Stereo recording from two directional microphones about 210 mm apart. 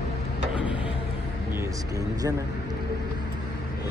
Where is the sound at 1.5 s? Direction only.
15° right (ahead or behind).